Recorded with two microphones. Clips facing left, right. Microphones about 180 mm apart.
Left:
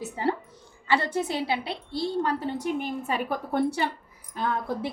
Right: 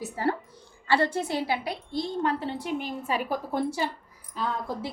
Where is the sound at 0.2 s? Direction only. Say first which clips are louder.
Even; 20° left (ahead or behind).